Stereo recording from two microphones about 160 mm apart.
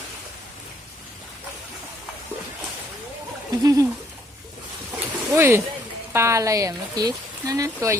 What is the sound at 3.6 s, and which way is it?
Speech, 20° right (ahead or behind).